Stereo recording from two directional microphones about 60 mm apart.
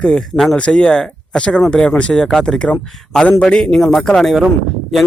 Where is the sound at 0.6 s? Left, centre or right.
Centre.